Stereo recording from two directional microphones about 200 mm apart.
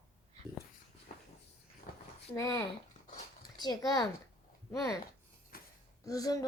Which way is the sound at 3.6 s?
20° left (ahead or behind).